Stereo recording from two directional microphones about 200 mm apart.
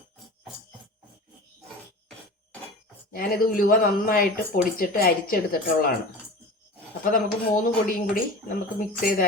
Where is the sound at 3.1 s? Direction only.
45° left (ahead or behind).